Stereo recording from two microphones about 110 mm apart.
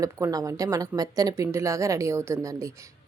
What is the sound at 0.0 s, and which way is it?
Speech, 35° right (ahead or behind).